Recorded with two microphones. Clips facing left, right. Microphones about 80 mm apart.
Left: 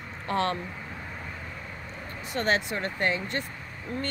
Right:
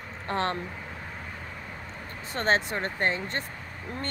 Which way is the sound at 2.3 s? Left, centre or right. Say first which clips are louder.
Right 1 dB; right.